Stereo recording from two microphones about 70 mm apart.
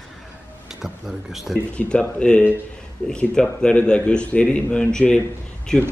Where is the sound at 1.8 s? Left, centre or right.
Centre.